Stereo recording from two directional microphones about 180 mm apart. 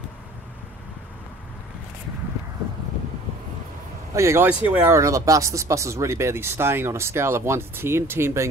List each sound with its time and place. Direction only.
4.1 s speech: 15° right (ahead or behind)